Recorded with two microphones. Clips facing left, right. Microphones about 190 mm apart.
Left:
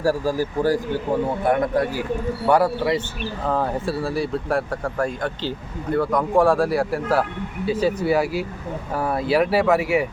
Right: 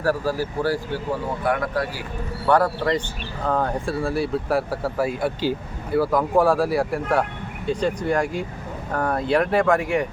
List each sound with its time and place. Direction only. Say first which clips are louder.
0.0 s speech: left 1 dB; 10° left (ahead or behind)
1.5 s speech: left 3 dB; 20° left (ahead or behind)
2.5 s speech: left 1 dB; 10° left (ahead or behind)